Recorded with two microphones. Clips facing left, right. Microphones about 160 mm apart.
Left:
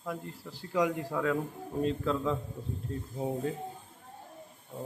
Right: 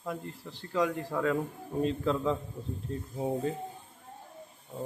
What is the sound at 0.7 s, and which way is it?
Speech, 15° left (ahead or behind).